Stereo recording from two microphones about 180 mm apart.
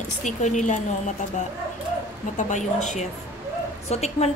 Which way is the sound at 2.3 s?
40° left (ahead or behind).